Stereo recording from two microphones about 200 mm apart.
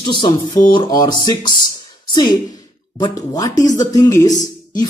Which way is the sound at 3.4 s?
20° left (ahead or behind).